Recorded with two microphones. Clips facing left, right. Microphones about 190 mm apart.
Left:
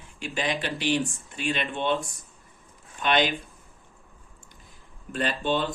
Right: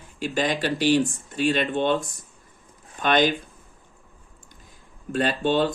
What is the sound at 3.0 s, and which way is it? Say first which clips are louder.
Speech: right 4 dB; 45° right (ahead or behind).